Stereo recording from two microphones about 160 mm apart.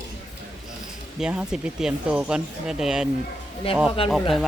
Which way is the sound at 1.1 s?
5° right (ahead or behind).